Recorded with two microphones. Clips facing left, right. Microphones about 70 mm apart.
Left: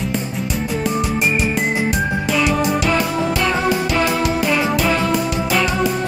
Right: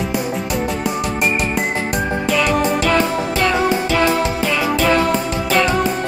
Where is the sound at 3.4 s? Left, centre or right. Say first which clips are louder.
Right 5 dB; left.